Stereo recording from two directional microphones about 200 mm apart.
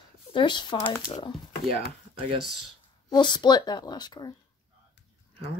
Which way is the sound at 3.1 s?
20° left (ahead or behind).